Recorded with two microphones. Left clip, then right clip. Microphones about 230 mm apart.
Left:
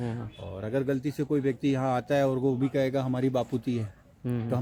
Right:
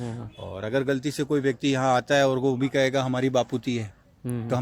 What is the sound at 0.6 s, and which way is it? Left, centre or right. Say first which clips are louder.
A man's voice: right 4 dB; right.